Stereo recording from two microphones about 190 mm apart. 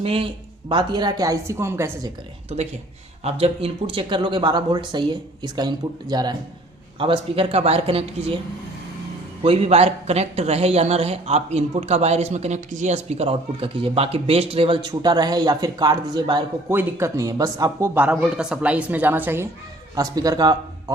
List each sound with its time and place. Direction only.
0.0 s speech: 30° right (ahead or behind); by 2.0 s 15° right (ahead or behind)
3.2 s speech: 30° right (ahead or behind)
9.4 s speech: 30° right (ahead or behind)